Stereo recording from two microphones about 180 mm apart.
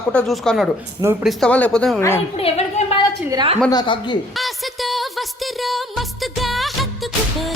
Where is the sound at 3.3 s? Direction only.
30° right (ahead or behind).